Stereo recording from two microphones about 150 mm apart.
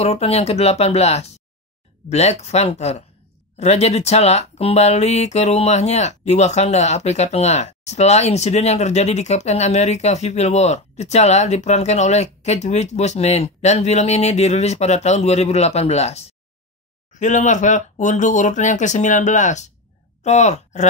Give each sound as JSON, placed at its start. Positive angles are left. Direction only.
{"t": 0.0, "sound": "speech", "side_deg": 45}